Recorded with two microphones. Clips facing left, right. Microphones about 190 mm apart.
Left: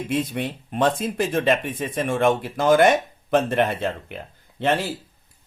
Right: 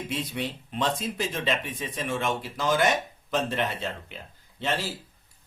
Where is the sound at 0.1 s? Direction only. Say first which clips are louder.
Left 8 dB; 50° left (ahead or behind).